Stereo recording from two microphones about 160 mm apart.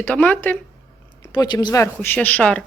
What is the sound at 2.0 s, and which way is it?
Speech, 10° left (ahead or behind).